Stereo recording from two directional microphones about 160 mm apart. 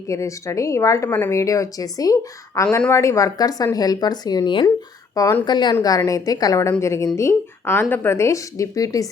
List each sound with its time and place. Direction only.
0.1 s speech: 20° left (ahead or behind)
5.5 s speech: 30° left (ahead or behind)